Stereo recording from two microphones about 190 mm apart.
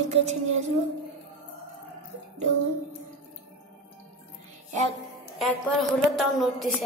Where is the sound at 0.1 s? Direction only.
35° right (ahead or behind).